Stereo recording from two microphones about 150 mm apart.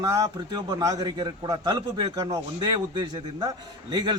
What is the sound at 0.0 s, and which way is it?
A man's voice, 25° right (ahead or behind).